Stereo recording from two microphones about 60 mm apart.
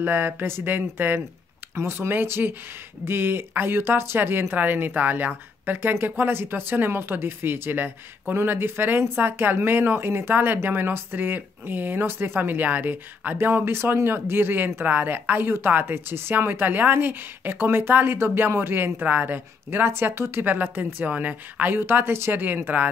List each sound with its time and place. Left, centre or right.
0.0 s speech: right
20.5 s speech: right